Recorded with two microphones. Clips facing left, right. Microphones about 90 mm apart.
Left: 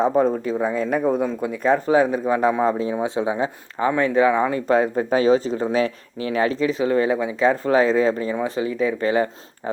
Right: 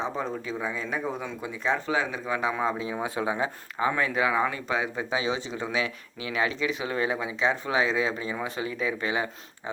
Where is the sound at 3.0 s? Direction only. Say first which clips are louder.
Left 6 dB; 25° left (ahead or behind).